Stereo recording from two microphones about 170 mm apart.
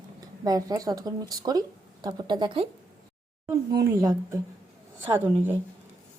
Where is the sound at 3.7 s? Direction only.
20° right (ahead or behind).